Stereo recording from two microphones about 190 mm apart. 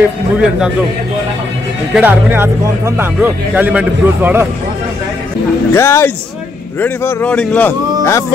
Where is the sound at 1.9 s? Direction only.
10° right (ahead or behind).